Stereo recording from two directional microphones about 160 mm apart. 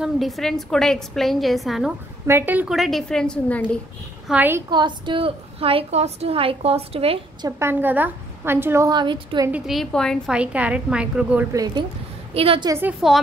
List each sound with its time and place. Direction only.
0.0 s a woman's voice: centre (ahead or behind)
2.2 s a woman's voice: 15° right (ahead or behind); by 3.7 s 10° left (ahead or behind)
4.3 s a woman's voice: 10° right (ahead or behind)
4.6 s a woman's voice: 30° right (ahead or behind)
7.4 s a woman's voice: 15° right (ahead or behind)
8.9 s a woman's voice: 30° right (ahead or behind)
9.5 s a woman's voice: centre (ahead or behind)
11.5 s a woman's voice: 25° right (ahead or behind)
12.4 s a woman's voice: 35° right (ahead or behind)
12.6 s a woman's voice: 15° right (ahead or behind)